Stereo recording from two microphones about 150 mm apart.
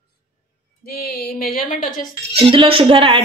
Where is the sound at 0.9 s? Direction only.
90° left; by 1.8 s 75° left (ahead or behind).